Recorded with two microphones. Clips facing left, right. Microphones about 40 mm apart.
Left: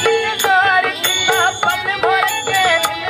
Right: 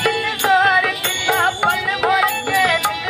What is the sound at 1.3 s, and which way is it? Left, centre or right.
Music, centre.